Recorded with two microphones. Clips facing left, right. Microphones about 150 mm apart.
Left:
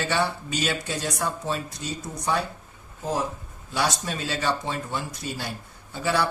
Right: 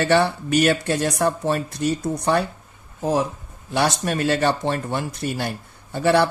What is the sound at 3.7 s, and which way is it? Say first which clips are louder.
Speech: right 6 dB; 60° right (ahead or behind).